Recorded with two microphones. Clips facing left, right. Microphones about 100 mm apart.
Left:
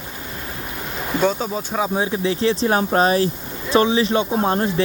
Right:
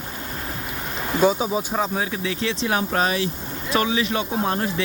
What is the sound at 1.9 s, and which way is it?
Speech, 25° left (ahead or behind).